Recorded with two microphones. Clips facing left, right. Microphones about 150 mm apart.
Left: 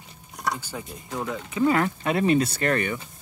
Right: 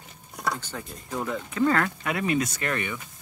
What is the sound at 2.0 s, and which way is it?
Speech, 30° left (ahead or behind).